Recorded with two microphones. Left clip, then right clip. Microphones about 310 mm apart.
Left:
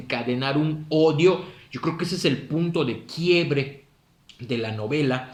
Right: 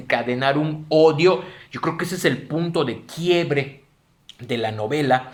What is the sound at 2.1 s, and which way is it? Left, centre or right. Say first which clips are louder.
Speech: right 3 dB; right.